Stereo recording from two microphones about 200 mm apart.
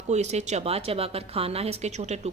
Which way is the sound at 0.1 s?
35° right (ahead or behind).